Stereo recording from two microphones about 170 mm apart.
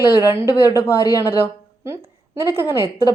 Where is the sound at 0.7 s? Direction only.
20° left (ahead or behind).